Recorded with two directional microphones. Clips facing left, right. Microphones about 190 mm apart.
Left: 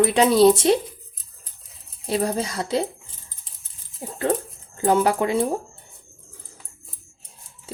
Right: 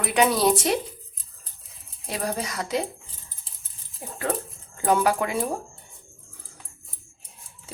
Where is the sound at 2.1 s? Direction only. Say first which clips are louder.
Left 6 dB; 30° left (ahead or behind).